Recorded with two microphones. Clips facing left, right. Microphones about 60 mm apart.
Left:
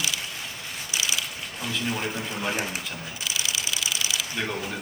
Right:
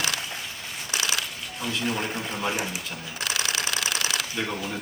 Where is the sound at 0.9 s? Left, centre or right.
Right.